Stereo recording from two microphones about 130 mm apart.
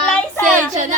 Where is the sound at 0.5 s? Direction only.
75° right (ahead or behind).